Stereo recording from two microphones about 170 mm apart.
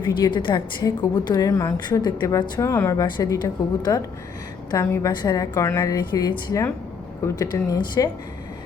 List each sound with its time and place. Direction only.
0.0 s a woman's voice: 25° left (ahead or behind)